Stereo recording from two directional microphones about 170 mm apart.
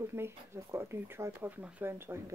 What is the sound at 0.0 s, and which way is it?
Speech, 15° right (ahead or behind).